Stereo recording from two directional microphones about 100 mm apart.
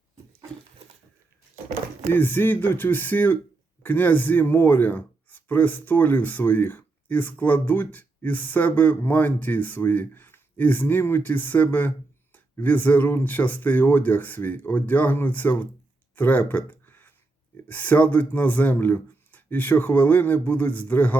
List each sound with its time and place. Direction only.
2.1 s speech: 20° left (ahead or behind)
16.1 s a sound: 15° left (ahead or behind)
17.7 s speech: 20° left (ahead or behind)